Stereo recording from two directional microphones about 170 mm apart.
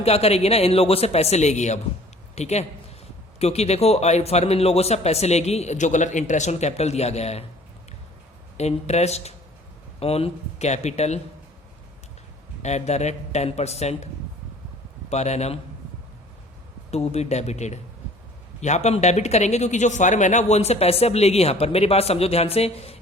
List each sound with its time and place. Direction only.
0.0 s a man's voice: 35° left (ahead or behind)
8.5 s a man's voice: 40° left (ahead or behind)
12.6 s a man's voice: 40° left (ahead or behind)
15.1 s a man's voice: 40° left (ahead or behind)
16.9 s a man's voice: 40° left (ahead or behind)